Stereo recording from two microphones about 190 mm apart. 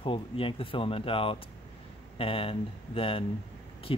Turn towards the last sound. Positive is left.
turn(degrees=30)  # may be behind; listen again after turning